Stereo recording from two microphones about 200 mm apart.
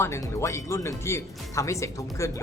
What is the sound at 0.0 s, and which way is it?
Speech, 15° left (ahead or behind).